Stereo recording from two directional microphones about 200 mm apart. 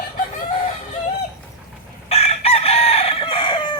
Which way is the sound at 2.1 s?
30° left (ahead or behind).